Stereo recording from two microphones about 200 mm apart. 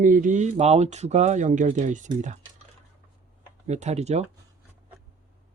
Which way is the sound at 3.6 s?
35° right (ahead or behind).